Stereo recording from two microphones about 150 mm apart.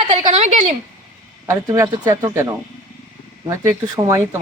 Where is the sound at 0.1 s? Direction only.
50° right (ahead or behind).